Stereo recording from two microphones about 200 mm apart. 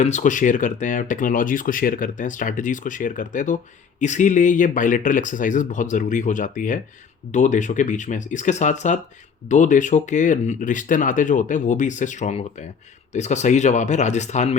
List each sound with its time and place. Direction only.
0.0 s speech: 40° left (ahead or behind)